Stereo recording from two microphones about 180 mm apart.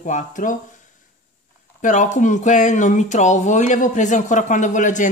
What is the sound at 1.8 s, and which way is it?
Speech, 45° left (ahead or behind).